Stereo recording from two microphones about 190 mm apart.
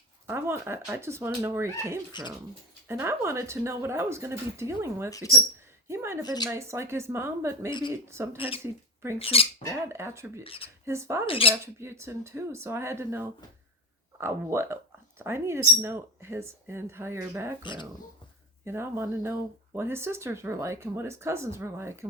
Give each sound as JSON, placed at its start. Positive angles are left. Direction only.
{"t": 0.3, "sound": "speech", "side_deg": -15}
{"t": 5.9, "sound": "a sound", "side_deg": -15}
{"t": 6.2, "sound": "speech", "side_deg": 20}
{"t": 6.5, "sound": "speech", "side_deg": -15}
{"t": 7.7, "sound": "speech", "side_deg": 25}
{"t": 8.0, "sound": "speech", "side_deg": -15}
{"t": 8.4, "sound": "speech", "side_deg": 30}
{"t": 9.9, "sound": "speech", "side_deg": -15}
{"t": 10.4, "sound": "speech", "side_deg": 30}
{"t": 10.8, "sound": "speech", "side_deg": -15}
{"t": 11.3, "sound": "speech", "side_deg": 30}
{"t": 11.6, "sound": "speech", "side_deg": -15}
{"t": 17.6, "sound": "speech", "side_deg": 25}
{"t": 18.6, "sound": "speech", "side_deg": -15}